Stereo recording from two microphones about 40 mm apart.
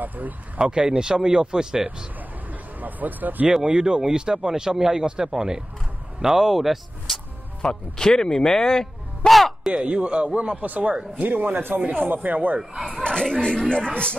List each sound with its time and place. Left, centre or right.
0.0 s speech: right
0.6 s speech: centre
2.8 s speech: right
3.6 s a man's voice: centre
7.6 s speech: centre
9.3 s music: centre
9.8 s speech: right
12.7 s a man's voice: centre
13.0 s speech: left